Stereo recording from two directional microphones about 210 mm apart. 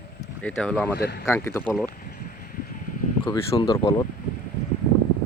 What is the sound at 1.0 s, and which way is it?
Speech, 50° left (ahead or behind).